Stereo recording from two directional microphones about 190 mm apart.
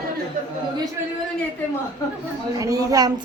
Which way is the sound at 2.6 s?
20° right (ahead or behind).